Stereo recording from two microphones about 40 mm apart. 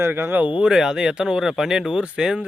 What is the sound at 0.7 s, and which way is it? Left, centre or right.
Speech, centre.